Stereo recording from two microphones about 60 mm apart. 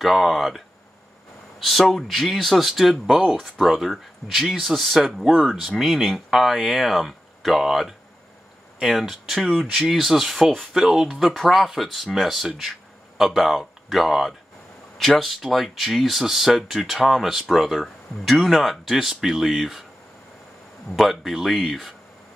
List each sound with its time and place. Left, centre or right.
0.0 s speech: centre
1.6 s speech: centre
20.9 s speech: centre